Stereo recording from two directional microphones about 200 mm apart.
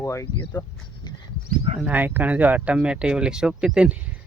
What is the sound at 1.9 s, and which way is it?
Speech, 10° right (ahead or behind).